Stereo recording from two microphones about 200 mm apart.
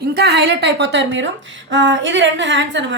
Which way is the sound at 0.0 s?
50° right (ahead or behind).